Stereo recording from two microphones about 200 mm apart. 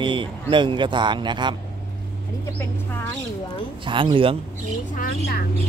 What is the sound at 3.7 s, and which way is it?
Speech, 25° right (ahead or behind).